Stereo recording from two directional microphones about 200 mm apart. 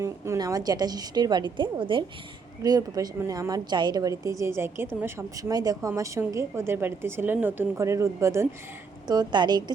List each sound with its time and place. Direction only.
0.0 s a woman's voice: 15° right (ahead or behind)